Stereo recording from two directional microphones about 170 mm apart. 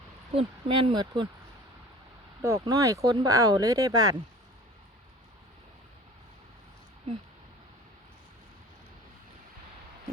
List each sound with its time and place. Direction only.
0.3 s speech: 30° right (ahead or behind)
2.4 s speech: 20° right (ahead or behind)